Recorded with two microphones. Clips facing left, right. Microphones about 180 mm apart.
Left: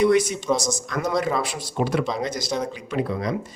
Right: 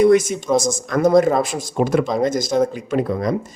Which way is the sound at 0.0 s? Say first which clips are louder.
Right 5 dB; 45° right (ahead or behind).